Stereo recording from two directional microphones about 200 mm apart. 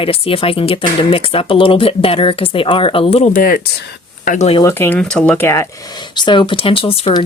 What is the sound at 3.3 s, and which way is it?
Speech, 45° left (ahead or behind).